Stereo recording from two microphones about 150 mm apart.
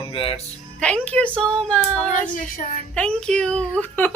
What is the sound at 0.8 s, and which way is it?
A woman's voice, 10° left (ahead or behind).